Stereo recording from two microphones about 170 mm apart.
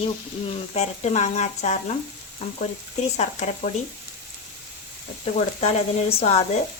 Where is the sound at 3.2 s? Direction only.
40° left (ahead or behind).